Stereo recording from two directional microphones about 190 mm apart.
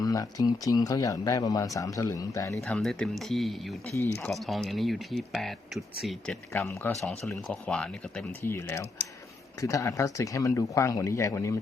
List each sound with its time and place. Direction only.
0.0 s speech: 20° left (ahead or behind)
2.6 s speech: centre (ahead or behind)
6.5 s speech: 10° left (ahead or behind)
6.9 s speech: centre (ahead or behind); by 11.5 s 15° left (ahead or behind)